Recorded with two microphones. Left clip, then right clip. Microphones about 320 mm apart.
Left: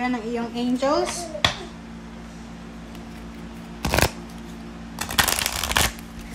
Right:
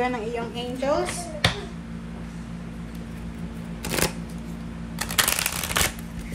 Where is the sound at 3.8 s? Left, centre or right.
Centre.